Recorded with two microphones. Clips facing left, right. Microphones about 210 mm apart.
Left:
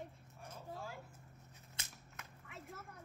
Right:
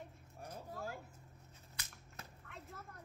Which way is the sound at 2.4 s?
5° left (ahead or behind).